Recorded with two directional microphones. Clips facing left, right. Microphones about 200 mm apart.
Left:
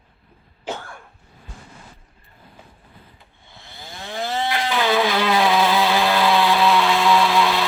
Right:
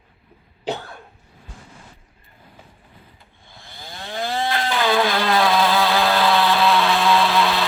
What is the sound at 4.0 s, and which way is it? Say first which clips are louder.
Chainsaw: even; 20° left (ahead or behind).